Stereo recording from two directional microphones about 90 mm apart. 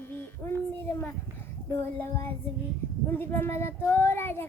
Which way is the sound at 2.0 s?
20° left (ahead or behind).